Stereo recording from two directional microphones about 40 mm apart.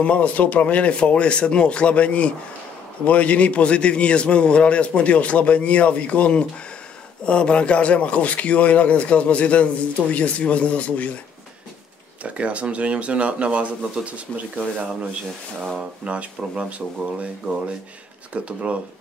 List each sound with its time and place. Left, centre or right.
0.0 s speech: left
12.2 s speech: right
16.0 s speech: right
18.3 s speech: right